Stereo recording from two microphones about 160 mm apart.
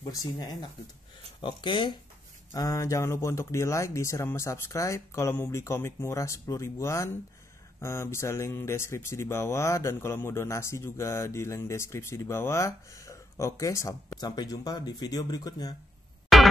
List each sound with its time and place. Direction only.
0.0 s speech: 20° left (ahead or behind)
16.3 s music: centre (ahead or behind)